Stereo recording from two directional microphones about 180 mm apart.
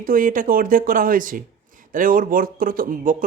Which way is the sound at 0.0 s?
50° right (ahead or behind).